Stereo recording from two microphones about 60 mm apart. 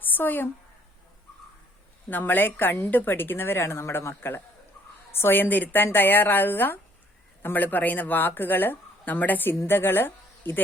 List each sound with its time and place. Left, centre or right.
0.0 s a woman's voice: left
2.0 s a woman's voice: left